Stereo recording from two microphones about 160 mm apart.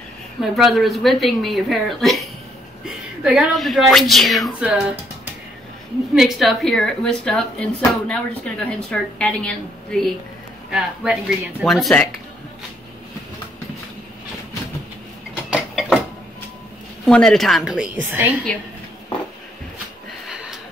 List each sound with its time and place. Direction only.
0.4 s speech: centre (ahead or behind)
3.3 s speech: 5° right (ahead or behind)
6.1 s speech: centre (ahead or behind)
15.5 s mechanisms: 5° right (ahead or behind)
17.0 s speech: 5° left (ahead or behind)
20.2 s a sound: 5° right (ahead or behind)